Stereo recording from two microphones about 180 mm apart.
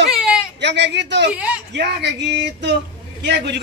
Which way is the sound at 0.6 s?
75° right (ahead or behind).